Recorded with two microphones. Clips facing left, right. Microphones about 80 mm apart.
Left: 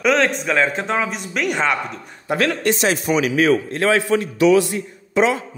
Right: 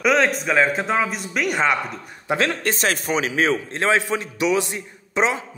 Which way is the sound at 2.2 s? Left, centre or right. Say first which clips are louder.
Left 2 dB; right.